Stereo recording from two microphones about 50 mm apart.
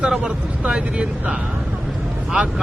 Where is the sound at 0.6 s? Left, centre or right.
Right.